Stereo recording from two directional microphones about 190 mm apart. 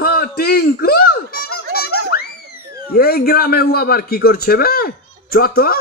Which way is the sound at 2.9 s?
55° left (ahead or behind).